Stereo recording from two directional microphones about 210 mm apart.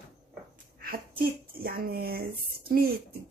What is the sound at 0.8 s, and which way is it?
Speech, 45° right (ahead or behind).